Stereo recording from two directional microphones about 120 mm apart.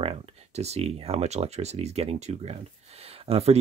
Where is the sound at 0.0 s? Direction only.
60° right (ahead or behind).